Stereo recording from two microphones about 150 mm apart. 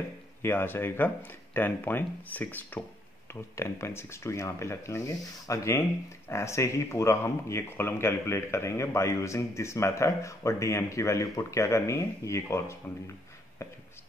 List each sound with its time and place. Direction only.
0.4 s speech: 15° left (ahead or behind)